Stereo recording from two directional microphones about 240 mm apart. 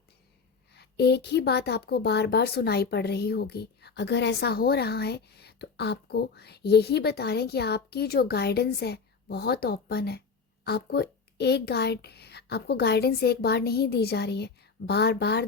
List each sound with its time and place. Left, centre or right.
0.7 s a woman's voice: left